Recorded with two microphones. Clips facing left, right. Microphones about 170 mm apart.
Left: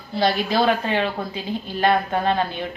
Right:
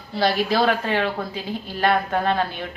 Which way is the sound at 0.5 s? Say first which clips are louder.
Left 1 dB; 20° left (ahead or behind).